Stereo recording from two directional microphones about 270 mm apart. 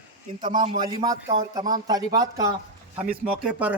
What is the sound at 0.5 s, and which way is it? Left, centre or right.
A man's voice, centre.